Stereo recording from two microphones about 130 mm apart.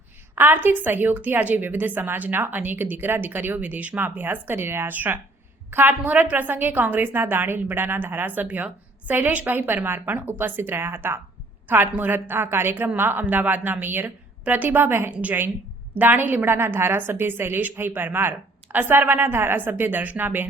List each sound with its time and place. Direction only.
0.3 s a woman's voice: 15° right (ahead or behind)